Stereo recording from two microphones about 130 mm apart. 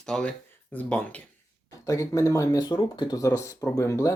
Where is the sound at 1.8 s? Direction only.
25° left (ahead or behind).